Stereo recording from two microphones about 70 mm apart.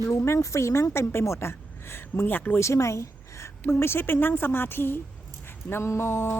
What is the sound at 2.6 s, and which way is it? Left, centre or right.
A woman's voice, left.